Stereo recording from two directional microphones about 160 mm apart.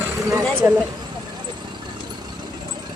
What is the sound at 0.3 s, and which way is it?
Speech, 20° right (ahead or behind).